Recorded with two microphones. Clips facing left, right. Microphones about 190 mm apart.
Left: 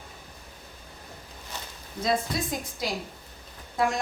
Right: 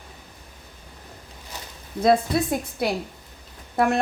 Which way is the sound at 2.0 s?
60° right (ahead or behind).